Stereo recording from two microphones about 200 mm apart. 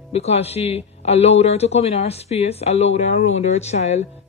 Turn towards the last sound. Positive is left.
turn(degrees=35)  # may be behind; listen again after turning